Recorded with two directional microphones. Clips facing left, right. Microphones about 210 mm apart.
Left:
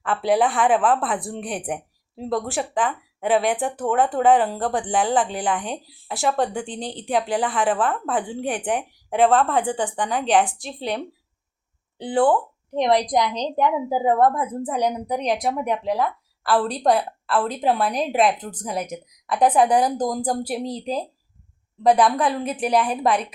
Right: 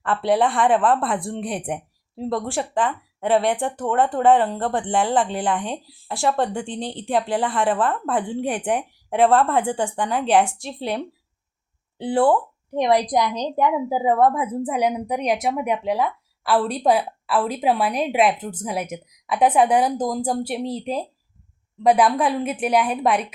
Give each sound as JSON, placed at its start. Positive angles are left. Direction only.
{"t": 0.0, "sound": "speech", "side_deg": 5}
{"t": 12.7, "sound": "a woman's voice", "side_deg": -10}